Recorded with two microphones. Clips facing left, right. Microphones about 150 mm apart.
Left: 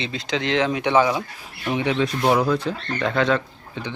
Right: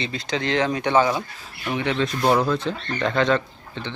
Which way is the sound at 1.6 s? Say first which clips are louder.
Left 2 dB; 20° left (ahead or behind).